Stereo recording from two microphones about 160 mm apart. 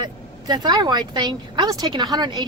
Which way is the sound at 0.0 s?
25° right (ahead or behind).